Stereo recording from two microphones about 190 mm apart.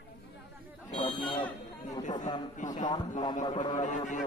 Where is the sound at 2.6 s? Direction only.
40° left (ahead or behind).